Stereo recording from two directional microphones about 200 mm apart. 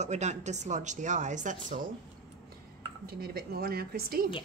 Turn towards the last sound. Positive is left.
turn(degrees=-50)  # may be behind; listen again after turning